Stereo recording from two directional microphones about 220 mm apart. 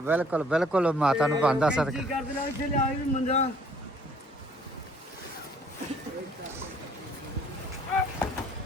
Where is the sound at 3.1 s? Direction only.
30° left (ahead or behind).